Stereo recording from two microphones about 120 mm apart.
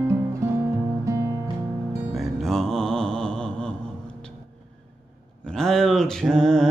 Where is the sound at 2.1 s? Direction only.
Centre (ahead or behind).